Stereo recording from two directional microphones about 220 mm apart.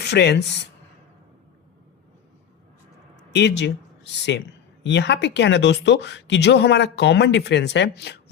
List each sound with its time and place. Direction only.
0.0 s speech: 50° left (ahead or behind)
3.3 s speech: 50° left (ahead or behind)